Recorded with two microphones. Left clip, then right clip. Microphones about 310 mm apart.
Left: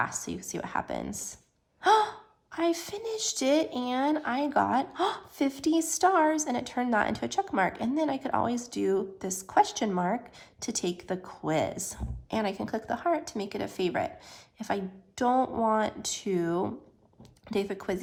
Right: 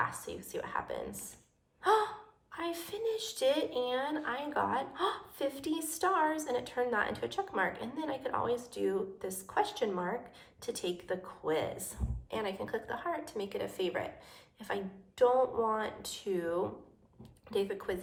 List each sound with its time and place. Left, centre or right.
0.3 s a woman's voice: left
1.8 s gasp: left
2.5 s a woman's voice: left